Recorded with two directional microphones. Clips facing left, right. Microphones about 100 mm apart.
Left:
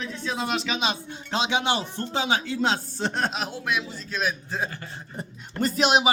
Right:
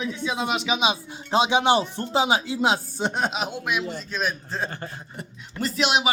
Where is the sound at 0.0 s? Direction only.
5° right (ahead or behind).